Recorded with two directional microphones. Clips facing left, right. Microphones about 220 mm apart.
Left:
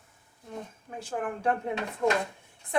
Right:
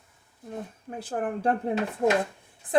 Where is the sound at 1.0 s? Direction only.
35° right (ahead or behind).